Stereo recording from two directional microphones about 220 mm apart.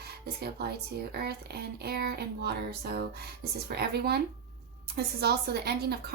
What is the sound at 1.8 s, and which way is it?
A woman's voice, 45° right (ahead or behind).